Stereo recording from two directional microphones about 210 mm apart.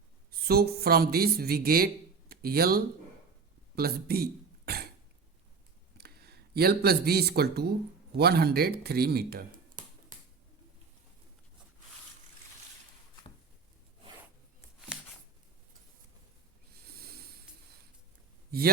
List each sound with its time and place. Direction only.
0.3 s speech: 45° right (ahead or behind)
3.8 s a sound: 45° right (ahead or behind)
6.0 s speech: 50° right (ahead or behind)
16.8 s snort: 45° right (ahead or behind)